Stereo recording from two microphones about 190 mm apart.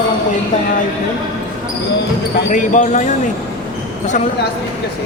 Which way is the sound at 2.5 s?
40° left (ahead or behind).